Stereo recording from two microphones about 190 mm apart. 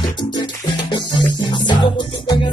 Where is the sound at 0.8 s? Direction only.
25° left (ahead or behind).